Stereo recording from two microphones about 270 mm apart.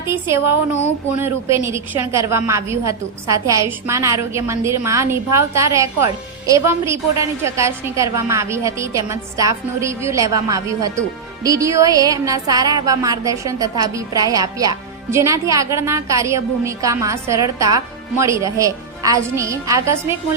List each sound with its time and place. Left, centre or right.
0.0 s a woman's voice: centre